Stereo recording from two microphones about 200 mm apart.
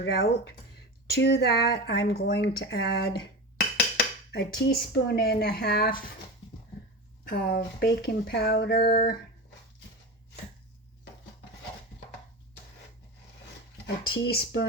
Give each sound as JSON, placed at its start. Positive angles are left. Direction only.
{"t": 0.0, "sound": "speech", "side_deg": 50}
{"t": 7.3, "sound": "speech", "side_deg": 45}
{"t": 14.3, "sound": "speech", "side_deg": 55}